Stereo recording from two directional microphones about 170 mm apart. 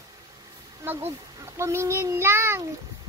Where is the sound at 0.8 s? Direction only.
15° right (ahead or behind).